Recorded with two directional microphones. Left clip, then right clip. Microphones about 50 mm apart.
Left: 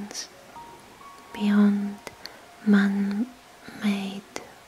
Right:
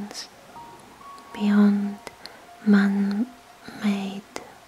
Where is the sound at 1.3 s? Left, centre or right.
Centre.